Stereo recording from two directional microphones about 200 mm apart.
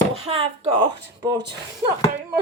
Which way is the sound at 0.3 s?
30° right (ahead or behind).